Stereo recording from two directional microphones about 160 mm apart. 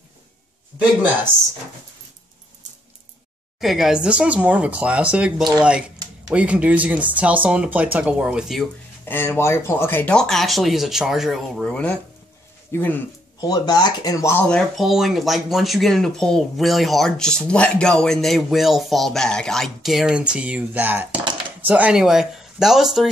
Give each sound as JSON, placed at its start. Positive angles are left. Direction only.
{"t": 3.6, "sound": "speech", "side_deg": 0}
{"t": 9.0, "sound": "speech", "side_deg": 10}
{"t": 14.5, "sound": "speech", "side_deg": 0}